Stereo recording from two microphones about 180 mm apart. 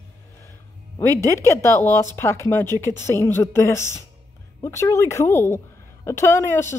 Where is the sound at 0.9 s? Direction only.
15° left (ahead or behind).